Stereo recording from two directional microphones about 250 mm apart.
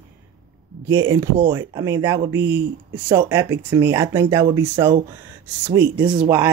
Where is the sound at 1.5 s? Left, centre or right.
Centre.